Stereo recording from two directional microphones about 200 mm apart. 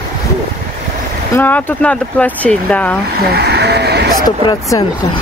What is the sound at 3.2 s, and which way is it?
Speech, 55° right (ahead or behind).